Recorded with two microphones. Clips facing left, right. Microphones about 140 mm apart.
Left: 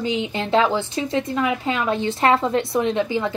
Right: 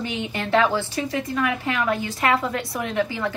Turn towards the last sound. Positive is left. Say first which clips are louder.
# left 3 dB
turn(degrees=20)  # may be behind; listen again after turning